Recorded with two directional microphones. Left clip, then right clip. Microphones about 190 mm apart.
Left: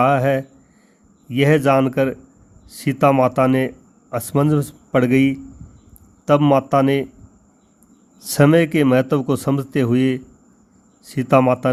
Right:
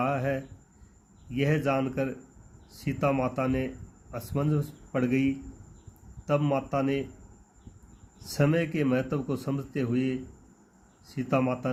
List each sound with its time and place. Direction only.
0.0 s a man's voice: 50° left (ahead or behind)
8.2 s a man's voice: 55° left (ahead or behind)